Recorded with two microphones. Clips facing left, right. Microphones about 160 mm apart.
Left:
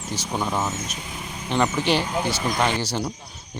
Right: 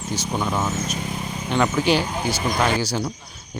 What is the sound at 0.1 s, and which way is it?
Speech, centre (ahead or behind).